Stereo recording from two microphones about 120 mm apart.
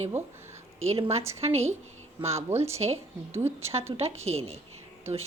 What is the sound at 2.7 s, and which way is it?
A woman's voice, 60° right (ahead or behind).